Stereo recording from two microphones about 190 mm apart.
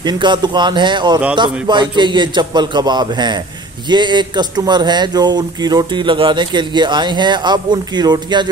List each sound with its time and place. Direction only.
0.0 s speech: 25° right (ahead or behind)